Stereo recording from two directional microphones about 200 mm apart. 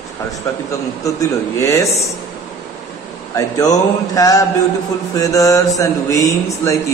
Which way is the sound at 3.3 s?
15° left (ahead or behind).